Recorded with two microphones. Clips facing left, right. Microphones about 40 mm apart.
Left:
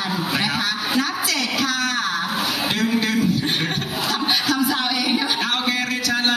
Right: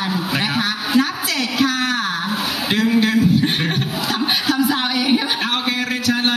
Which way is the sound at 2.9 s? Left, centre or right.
Centre.